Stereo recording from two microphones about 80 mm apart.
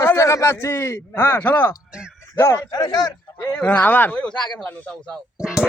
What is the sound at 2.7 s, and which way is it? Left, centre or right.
Speech, left.